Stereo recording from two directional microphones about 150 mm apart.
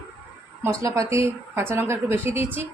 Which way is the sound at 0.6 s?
20° right (ahead or behind).